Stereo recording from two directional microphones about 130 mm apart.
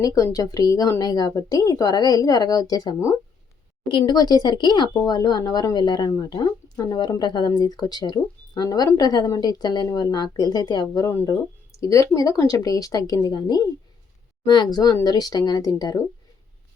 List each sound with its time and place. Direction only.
0.0 s a woman's voice: 25° left (ahead or behind)